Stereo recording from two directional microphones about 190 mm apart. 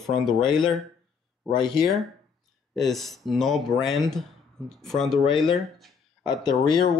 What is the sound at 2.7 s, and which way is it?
Speech, centre (ahead or behind).